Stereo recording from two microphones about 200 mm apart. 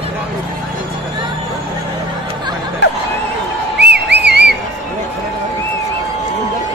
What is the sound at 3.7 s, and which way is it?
Whistle, 55° right (ahead or behind).